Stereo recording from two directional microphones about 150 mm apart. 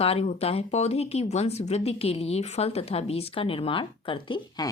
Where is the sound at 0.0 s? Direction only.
40° left (ahead or behind).